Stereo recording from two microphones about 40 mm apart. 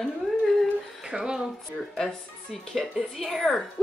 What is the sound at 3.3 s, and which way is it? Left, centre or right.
Speech, centre.